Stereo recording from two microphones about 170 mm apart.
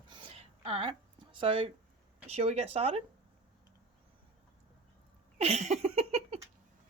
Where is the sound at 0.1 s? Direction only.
30° right (ahead or behind).